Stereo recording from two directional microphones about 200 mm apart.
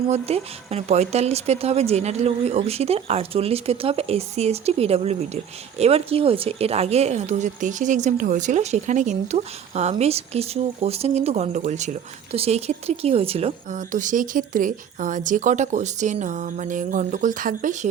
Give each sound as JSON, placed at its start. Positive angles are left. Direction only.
{"t": 0.1, "sound": "speech", "side_deg": -30}